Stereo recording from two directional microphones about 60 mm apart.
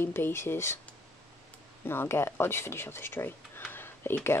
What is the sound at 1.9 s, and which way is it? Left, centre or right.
Speech, left.